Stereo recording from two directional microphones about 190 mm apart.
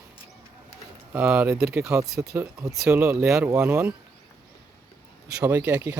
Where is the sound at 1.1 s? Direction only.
5° right (ahead or behind).